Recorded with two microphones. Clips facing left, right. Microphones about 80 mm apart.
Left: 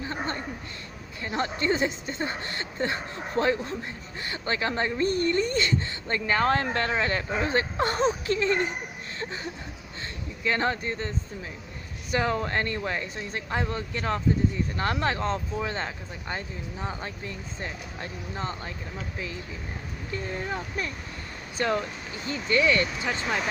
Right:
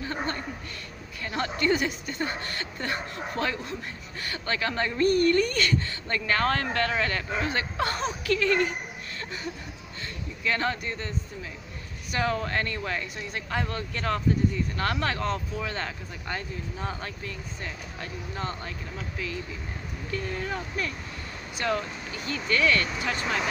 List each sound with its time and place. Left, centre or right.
0.0 s a sound: left
1.2 s speech: left
9.2 s a sound: left
10.4 s speech: left
20.1 s speech: left
23.2 s speech: centre